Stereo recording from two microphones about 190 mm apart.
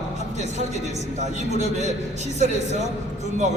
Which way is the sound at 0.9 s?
40° right (ahead or behind).